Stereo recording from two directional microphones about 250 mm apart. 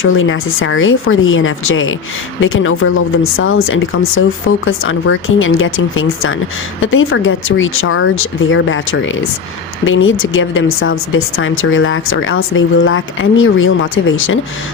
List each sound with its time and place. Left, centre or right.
0.0 s speech: left